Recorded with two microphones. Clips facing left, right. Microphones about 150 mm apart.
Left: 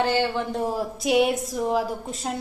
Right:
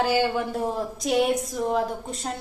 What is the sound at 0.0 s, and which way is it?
Speech, 10° right (ahead or behind).